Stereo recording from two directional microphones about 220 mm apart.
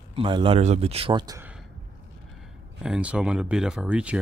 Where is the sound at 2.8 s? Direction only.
5° right (ahead or behind).